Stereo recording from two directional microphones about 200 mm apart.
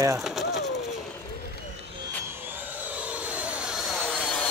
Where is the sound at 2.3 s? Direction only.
10° right (ahead or behind).